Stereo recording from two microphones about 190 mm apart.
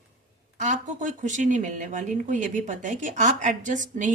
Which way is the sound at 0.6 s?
40° right (ahead or behind).